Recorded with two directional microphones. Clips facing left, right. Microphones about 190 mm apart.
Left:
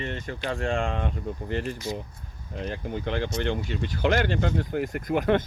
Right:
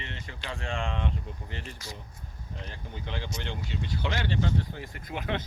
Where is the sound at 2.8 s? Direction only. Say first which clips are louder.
Left 9 dB; 55° left (ahead or behind).